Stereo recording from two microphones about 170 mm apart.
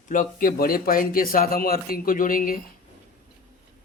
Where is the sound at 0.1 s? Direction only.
55° left (ahead or behind).